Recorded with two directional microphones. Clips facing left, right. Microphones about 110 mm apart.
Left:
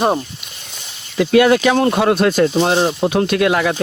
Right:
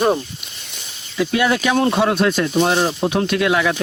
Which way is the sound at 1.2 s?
60° left (ahead or behind).